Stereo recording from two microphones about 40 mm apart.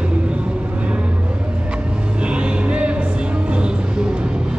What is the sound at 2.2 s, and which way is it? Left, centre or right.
Music, right.